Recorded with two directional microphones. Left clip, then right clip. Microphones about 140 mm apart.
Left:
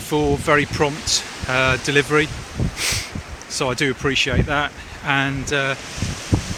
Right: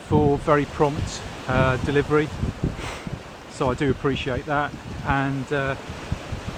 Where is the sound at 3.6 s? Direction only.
10° left (ahead or behind).